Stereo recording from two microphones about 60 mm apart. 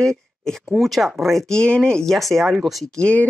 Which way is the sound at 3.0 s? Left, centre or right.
Left.